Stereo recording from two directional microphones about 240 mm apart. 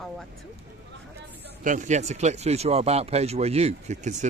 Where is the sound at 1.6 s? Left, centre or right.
Right.